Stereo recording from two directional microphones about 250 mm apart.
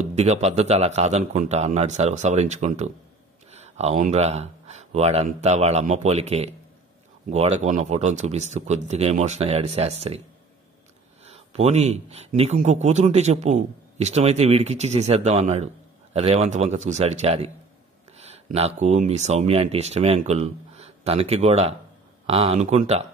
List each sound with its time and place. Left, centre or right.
0.0 s a man's voice: right
11.2 s a man's voice: right